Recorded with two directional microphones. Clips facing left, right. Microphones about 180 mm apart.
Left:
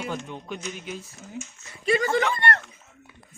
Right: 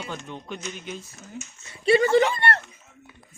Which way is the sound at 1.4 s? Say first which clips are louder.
Left 4 dB; 30° right (ahead or behind).